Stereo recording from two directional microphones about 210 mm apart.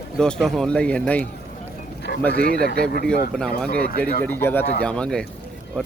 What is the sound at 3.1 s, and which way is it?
Speech, 5° left (ahead or behind).